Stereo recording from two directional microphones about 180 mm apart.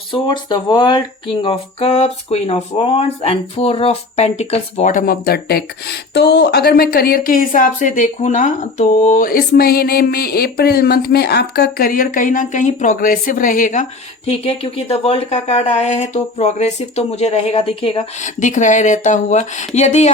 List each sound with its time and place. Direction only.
0.1 s speech: 25° left (ahead or behind); by 13.8 s 45° left (ahead or behind)
14.3 s speech: 35° left (ahead or behind)